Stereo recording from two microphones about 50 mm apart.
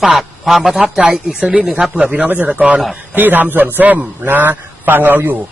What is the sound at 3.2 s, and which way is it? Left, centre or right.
A man's voice, right.